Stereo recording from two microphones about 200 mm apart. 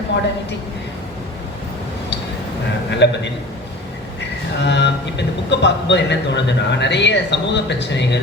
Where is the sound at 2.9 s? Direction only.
60° left (ahead or behind).